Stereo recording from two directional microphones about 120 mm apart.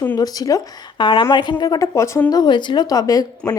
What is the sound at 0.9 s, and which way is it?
Speech, 45° left (ahead or behind).